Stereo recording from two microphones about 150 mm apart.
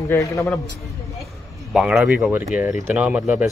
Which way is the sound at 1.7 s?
5° right (ahead or behind).